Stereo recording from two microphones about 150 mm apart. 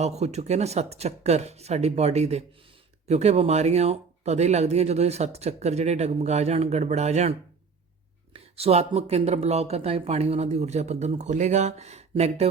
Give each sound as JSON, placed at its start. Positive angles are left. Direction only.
{"t": 0.0, "sound": "speech", "side_deg": -45}